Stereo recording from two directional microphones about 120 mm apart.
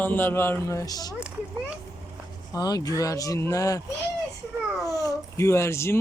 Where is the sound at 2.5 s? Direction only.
30° left (ahead or behind).